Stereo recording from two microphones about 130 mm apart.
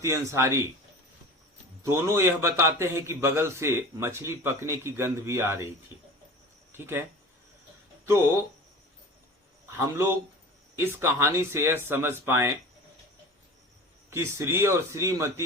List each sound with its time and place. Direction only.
0.0 s a man's voice: 25° right (ahead or behind)
1.8 s a man's voice: 20° right (ahead or behind)
6.7 s speech: 15° right (ahead or behind)
9.7 s a man's voice: 15° right (ahead or behind)
14.1 s a man's voice: 20° right (ahead or behind)